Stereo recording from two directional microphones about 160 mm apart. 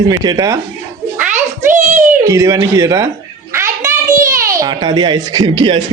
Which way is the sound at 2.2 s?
20° right (ahead or behind).